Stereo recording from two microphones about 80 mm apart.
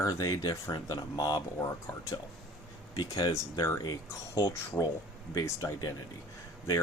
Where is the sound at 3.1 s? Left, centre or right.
Left.